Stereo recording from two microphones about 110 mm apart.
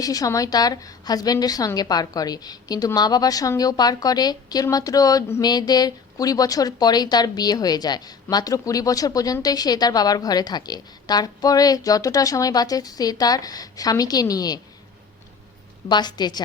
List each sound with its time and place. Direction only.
0.0 s speech: 35° left (ahead or behind)
15.9 s speech: 40° left (ahead or behind)